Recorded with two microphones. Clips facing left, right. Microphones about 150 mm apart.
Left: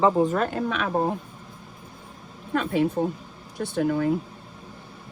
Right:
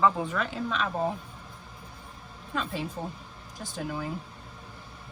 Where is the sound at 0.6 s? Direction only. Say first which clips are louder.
Left 5 dB; 65° left (ahead or behind).